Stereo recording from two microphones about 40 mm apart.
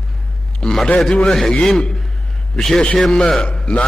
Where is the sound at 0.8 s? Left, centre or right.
Left.